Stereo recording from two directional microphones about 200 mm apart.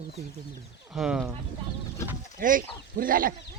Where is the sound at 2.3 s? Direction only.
45° right (ahead or behind).